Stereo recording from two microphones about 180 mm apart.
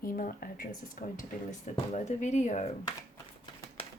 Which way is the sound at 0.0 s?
50° left (ahead or behind).